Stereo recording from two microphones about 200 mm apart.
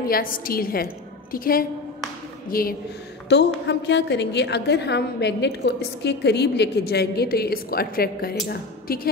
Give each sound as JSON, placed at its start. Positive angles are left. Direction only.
{"t": 0.1, "sound": "a woman's voice", "side_deg": 45}
{"t": 3.3, "sound": "a woman's voice", "side_deg": 60}